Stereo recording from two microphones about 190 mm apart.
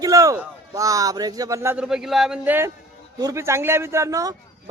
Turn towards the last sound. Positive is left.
turn(degrees=-15)  # may be behind; listen again after turning